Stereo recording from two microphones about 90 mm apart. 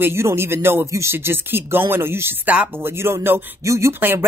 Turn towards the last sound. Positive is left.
turn(degrees=-35)  # may be behind; listen again after turning